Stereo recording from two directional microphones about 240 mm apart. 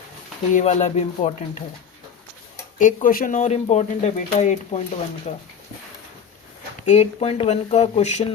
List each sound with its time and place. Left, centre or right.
0.5 s speech: left
2.7 s speech: left
6.8 s speech: left